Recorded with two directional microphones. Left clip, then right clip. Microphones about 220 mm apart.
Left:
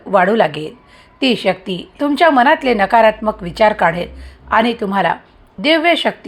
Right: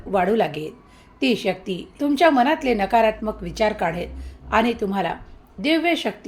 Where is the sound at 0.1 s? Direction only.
15° left (ahead or behind).